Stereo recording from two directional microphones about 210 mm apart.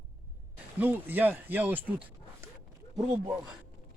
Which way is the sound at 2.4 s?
15° right (ahead or behind).